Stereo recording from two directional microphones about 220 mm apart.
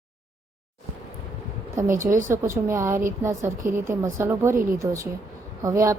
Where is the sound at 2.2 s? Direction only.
10° right (ahead or behind).